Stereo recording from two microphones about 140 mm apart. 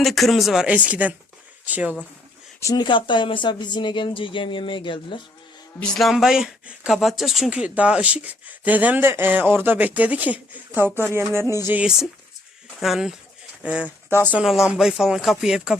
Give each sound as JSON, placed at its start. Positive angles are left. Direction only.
{"t": 0.0, "sound": "speech", "side_deg": 0}
{"t": 2.6, "sound": "speech", "side_deg": 25}
{"t": 5.8, "sound": "speech", "side_deg": 5}